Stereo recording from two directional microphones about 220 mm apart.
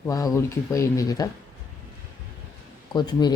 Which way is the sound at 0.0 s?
15° left (ahead or behind).